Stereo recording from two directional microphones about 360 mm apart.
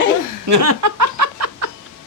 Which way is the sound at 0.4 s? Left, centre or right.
Right.